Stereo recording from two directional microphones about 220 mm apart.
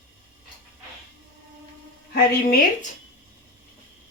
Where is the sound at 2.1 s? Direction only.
45° left (ahead or behind).